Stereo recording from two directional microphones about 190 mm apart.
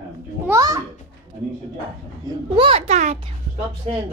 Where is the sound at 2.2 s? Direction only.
25° right (ahead or behind).